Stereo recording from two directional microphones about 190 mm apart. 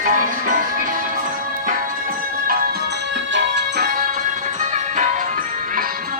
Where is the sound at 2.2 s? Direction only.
50° right (ahead or behind).